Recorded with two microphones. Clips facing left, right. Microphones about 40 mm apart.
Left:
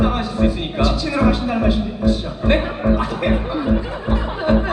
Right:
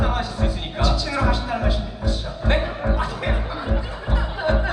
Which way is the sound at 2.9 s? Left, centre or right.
Left.